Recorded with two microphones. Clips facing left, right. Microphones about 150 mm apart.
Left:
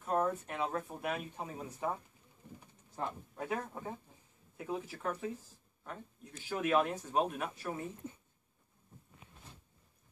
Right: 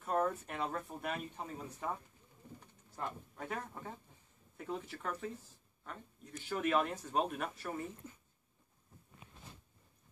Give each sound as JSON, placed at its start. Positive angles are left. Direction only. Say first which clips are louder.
{"t": 0.0, "sound": "speech", "louder": "left 1 dB", "side_deg": 5}
{"t": 3.0, "sound": "speech", "louder": "left 3 dB", "side_deg": 15}
{"t": 6.5, "sound": "speech", "louder": "left 2 dB", "side_deg": 5}
{"t": 8.0, "sound": "speech", "louder": "left 6 dB", "side_deg": 25}